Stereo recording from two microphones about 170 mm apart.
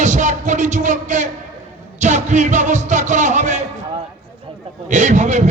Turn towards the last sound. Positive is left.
turn(degrees=-45)  # may be behind; listen again after turning